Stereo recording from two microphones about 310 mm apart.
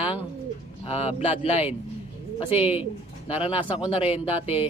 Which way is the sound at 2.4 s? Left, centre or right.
Centre.